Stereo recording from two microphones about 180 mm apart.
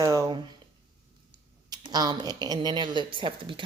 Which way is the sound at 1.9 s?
20° right (ahead or behind).